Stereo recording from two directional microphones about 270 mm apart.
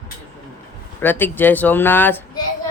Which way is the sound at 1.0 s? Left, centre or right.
Centre.